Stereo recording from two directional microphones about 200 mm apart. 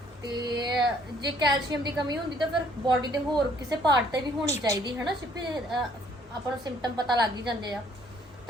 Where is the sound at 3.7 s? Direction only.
20° right (ahead or behind).